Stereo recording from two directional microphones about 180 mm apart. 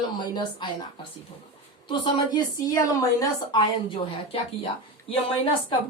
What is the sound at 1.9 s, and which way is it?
Speech, 20° left (ahead or behind).